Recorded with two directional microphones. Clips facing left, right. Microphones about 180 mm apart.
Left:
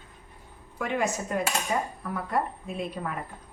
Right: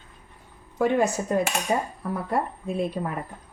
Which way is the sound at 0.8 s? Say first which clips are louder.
Right 6 dB; 35° right (ahead or behind).